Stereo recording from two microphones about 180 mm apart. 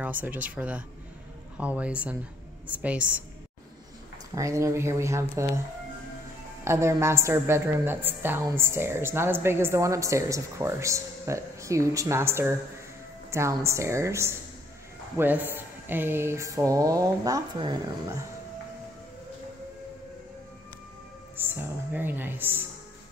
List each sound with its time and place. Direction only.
0.0 s a woman's voice: 10° right (ahead or behind)
4.4 s a woman's voice: 15° right (ahead or behind)
6.6 s a woman's voice: 15° right (ahead or behind)
21.4 s speech: 10° right (ahead or behind)